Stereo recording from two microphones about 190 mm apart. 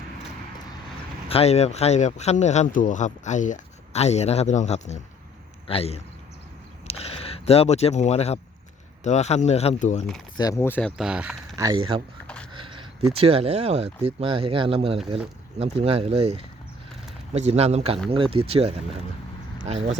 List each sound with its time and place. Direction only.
1.3 s speech: 35° left (ahead or behind)
10.3 s speech: 20° left (ahead or behind)
10.9 s speech: 5° right (ahead or behind)
11.5 s speech: 20° right (ahead or behind); by 20.0 s 35° right (ahead or behind)